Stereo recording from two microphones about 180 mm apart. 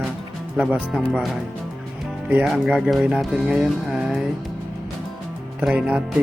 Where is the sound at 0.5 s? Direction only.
5° right (ahead or behind).